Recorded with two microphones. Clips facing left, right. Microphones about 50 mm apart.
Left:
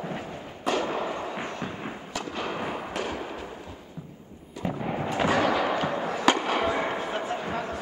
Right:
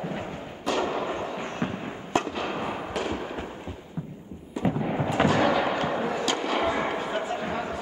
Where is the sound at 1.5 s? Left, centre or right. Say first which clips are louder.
Right 3 dB; right.